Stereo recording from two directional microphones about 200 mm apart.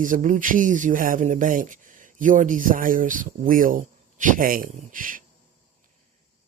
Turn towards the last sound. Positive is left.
turn(degrees=-45)  # may be behind; listen again after turning